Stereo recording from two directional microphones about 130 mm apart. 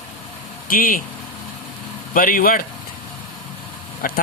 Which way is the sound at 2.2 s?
90° left.